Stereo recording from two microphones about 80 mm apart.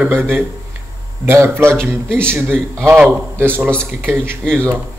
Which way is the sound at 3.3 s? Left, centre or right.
Right.